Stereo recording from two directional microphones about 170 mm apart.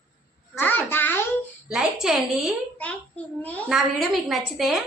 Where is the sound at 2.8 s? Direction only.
10° left (ahead or behind).